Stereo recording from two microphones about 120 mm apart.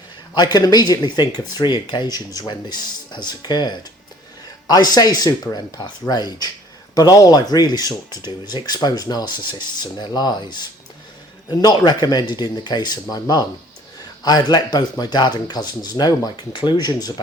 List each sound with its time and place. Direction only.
0.3 s speech: 35° left (ahead or behind)